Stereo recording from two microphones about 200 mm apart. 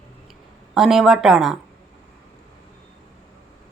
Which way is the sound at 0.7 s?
Centre (ahead or behind).